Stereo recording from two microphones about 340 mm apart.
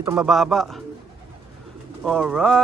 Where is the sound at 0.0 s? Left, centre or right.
Centre.